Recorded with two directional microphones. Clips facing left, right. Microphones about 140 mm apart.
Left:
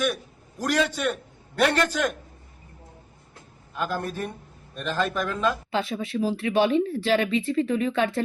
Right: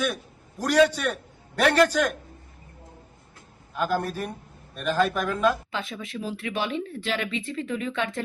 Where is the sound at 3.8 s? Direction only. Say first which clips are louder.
Right 2 dB; 10° right (ahead or behind).